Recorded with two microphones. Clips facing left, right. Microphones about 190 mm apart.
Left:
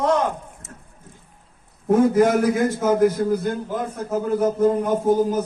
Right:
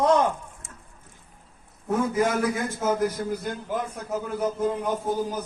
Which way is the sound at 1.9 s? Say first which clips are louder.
Left 8 dB; 55° left (ahead or behind).